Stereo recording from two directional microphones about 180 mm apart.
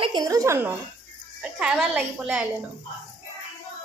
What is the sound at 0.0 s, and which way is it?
Speech, 20° right (ahead or behind).